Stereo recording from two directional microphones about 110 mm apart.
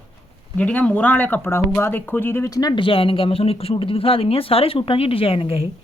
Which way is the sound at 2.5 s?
40° left (ahead or behind).